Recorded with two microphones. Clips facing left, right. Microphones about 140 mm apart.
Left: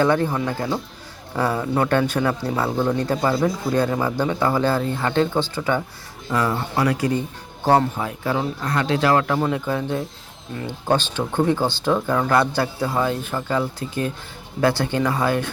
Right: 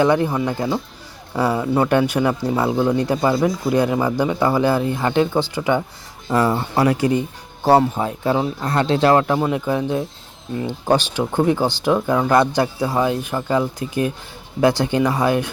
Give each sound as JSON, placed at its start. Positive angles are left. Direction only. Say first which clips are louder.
{"t": 0.0, "sound": "speech", "louder": "right 2 dB", "side_deg": -15}
{"t": 6.2, "sound": "speech", "louder": "right 4 dB", "side_deg": -30}
{"t": 7.6, "sound": "speech", "louder": "right 3 dB", "side_deg": -10}
{"t": 7.9, "sound": "speech", "louder": "right 4 dB", "side_deg": -25}